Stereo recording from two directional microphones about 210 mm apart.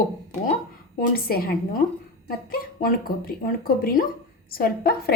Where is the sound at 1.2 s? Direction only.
45° left (ahead or behind).